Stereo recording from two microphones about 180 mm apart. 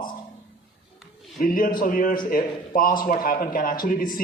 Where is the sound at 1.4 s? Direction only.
50° left (ahead or behind).